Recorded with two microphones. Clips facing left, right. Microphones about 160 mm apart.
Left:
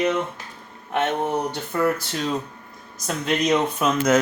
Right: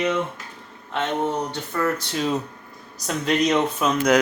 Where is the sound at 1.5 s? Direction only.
10° left (ahead or behind).